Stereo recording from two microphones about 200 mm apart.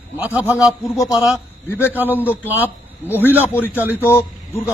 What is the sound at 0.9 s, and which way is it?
Speech, 20° left (ahead or behind).